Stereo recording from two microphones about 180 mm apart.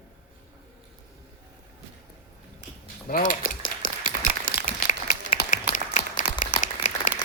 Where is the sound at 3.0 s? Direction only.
50° left (ahead or behind).